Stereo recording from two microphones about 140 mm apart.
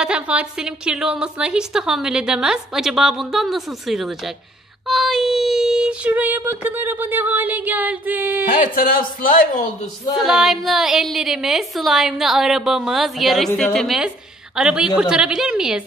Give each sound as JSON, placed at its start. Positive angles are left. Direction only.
{"t": 0.0, "sound": "a woman's voice", "side_deg": -10}
{"t": 4.8, "sound": "child singing", "side_deg": 0}
{"t": 8.7, "sound": "speech", "side_deg": 90}
{"t": 10.1, "sound": "a woman's voice", "side_deg": -5}